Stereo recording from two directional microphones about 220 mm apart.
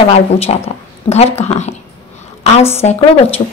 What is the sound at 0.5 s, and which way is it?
A woman's voice, 30° left (ahead or behind).